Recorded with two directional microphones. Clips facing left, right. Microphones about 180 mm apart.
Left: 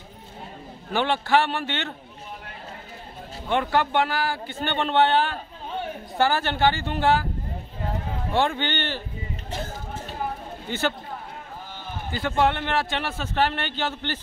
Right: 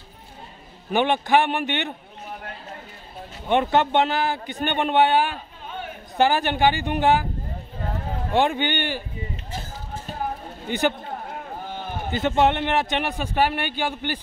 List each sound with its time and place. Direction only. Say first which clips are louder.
0.9 s speech: right 2 dB; 20° right (ahead or behind)
3.4 s speech: right 3 dB; 20° right (ahead or behind)
8.3 s speech: right 3 dB; 15° right (ahead or behind)
10.7 s speech: right 4 dB; 15° right (ahead or behind)
12.1 s speech: right 3 dB; 20° right (ahead or behind)